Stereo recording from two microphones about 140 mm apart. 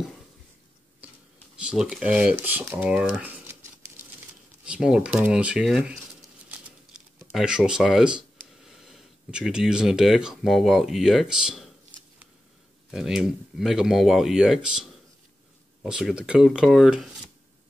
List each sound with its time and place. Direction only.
1.0 s a sound: 10° right (ahead or behind)
1.6 s speech: 5° right (ahead or behind)
2.7 s crumpling: 5° right (ahead or behind)
4.6 s speech: 5° right (ahead or behind)
7.3 s speech: 5° right (ahead or behind)
12.9 s speech: 5° right (ahead or behind)